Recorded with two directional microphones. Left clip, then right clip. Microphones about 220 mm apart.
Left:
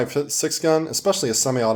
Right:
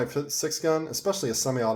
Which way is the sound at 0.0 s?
30° left (ahead or behind).